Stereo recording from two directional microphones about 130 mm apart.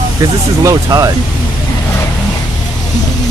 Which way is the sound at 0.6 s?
30° right (ahead or behind).